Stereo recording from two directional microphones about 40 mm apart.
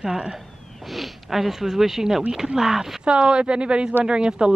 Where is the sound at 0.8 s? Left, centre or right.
Centre.